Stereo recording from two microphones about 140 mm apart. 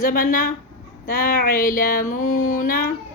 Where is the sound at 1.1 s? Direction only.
90° left.